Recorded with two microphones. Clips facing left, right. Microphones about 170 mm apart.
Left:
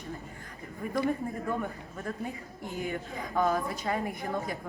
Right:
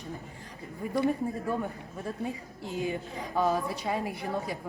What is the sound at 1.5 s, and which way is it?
A woman's voice, 20° right (ahead or behind).